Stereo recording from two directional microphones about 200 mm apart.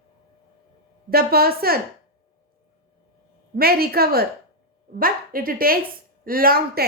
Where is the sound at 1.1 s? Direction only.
50° right (ahead or behind).